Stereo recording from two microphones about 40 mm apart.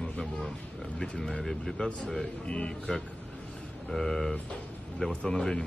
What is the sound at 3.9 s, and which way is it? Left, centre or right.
Speech, centre.